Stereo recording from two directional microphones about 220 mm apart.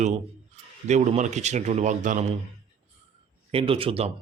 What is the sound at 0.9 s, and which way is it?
A man's voice, 30° right (ahead or behind).